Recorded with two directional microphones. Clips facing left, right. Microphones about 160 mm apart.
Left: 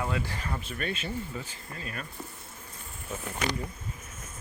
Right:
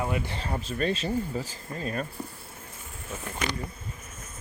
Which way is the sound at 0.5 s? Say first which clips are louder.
Right 8 dB; 35° right (ahead or behind).